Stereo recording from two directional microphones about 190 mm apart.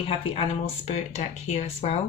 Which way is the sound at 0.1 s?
30° left (ahead or behind).